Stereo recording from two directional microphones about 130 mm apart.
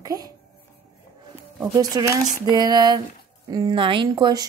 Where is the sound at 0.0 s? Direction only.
30° right (ahead or behind).